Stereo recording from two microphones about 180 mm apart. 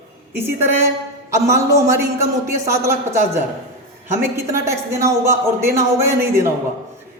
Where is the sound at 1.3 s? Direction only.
15° right (ahead or behind).